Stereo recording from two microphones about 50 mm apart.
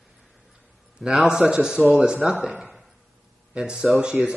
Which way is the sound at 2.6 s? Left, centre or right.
Centre.